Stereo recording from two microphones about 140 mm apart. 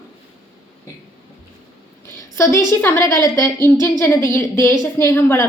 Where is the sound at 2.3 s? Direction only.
20° left (ahead or behind).